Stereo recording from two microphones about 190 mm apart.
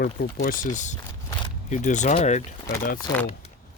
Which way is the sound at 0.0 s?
50° left (ahead or behind).